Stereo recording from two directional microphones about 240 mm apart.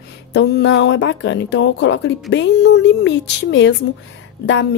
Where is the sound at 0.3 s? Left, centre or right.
Left.